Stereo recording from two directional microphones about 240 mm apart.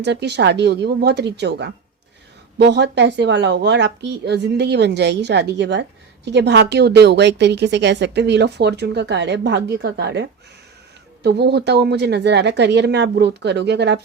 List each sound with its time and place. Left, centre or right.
0.0 s a woman's voice: right